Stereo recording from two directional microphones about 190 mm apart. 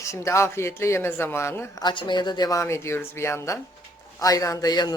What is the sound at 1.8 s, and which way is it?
Speech, 25° left (ahead or behind).